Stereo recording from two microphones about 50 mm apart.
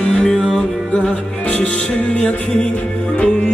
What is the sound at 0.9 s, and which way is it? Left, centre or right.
Music, left.